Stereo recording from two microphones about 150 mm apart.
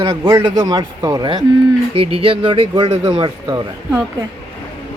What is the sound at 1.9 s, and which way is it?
Speech, 40° right (ahead or behind).